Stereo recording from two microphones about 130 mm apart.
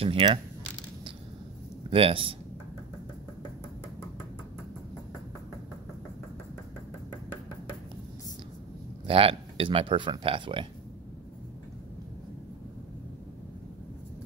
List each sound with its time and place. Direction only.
0.0 s speech: 45° right (ahead or behind)
1.9 s speech: 45° right (ahead or behind)
9.0 s speech: 45° right (ahead or behind)